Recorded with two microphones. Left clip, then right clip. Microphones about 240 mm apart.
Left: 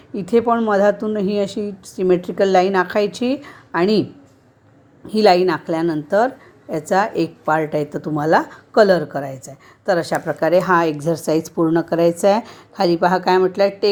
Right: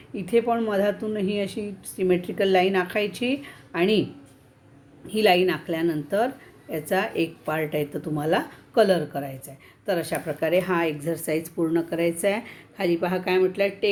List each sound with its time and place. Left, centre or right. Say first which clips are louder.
0.1 s speech: left 6 dB; left
5.0 s speech: left 6 dB; centre